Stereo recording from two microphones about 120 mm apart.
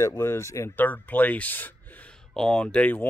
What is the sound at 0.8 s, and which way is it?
Speech, 15° left (ahead or behind).